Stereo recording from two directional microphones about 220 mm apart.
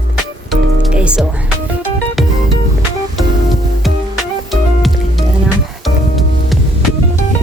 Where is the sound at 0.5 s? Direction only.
5° right (ahead or behind).